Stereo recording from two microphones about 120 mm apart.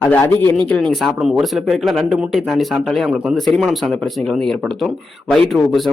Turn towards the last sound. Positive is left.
turn(degrees=0)  # may be behind; listen again after turning